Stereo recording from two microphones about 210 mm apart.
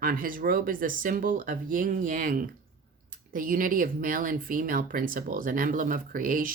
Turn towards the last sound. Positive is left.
turn(degrees=-40)  # may be behind; listen again after turning